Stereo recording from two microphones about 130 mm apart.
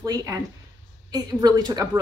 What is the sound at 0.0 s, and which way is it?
Speech, 25° right (ahead or behind).